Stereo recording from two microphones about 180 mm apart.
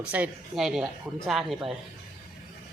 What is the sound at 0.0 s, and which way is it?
Speech, 5° right (ahead or behind).